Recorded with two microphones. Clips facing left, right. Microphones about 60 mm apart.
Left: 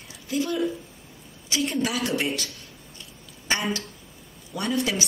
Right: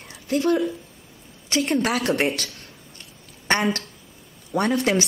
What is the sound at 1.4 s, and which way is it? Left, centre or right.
A woman's voice, right.